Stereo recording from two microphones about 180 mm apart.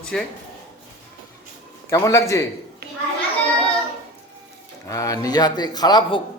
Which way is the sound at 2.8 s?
60° right (ahead or behind).